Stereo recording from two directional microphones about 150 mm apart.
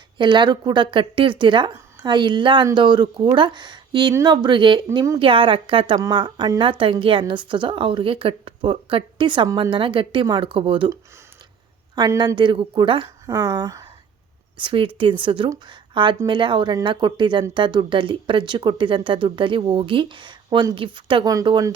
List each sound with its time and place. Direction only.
0.2 s a woman's voice: 30° right (ahead or behind)
11.9 s a woman's voice: 25° right (ahead or behind)
14.6 s a woman's voice: 35° right (ahead or behind)